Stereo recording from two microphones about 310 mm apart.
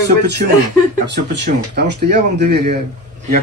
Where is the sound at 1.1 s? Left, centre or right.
Right.